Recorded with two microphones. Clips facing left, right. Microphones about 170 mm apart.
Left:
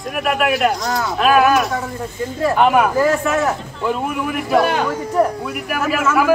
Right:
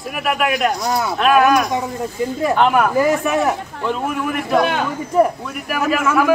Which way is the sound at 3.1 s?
15° right (ahead or behind).